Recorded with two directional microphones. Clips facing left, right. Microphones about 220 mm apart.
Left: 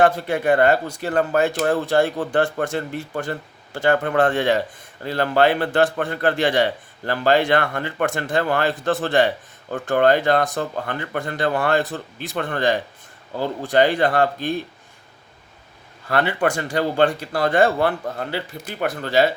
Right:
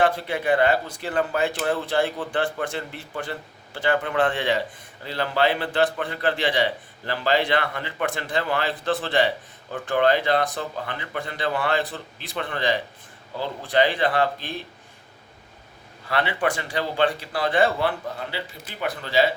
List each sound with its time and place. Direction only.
0.0 s a man's voice: 45° left (ahead or behind)
16.0 s a man's voice: 45° left (ahead or behind)